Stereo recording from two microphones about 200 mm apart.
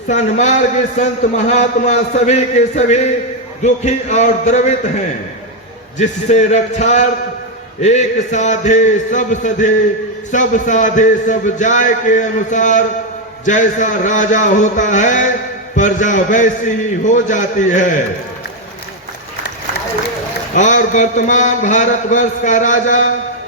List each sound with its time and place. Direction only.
0.1 s a man's voice: 35° left (ahead or behind)
6.0 s a man's voice: 35° left (ahead or behind)
20.6 s a man's voice: 40° left (ahead or behind)